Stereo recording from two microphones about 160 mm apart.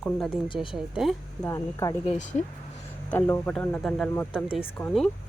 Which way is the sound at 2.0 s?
50° left (ahead or behind).